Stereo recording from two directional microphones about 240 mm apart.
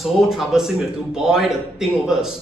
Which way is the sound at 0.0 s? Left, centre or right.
Centre.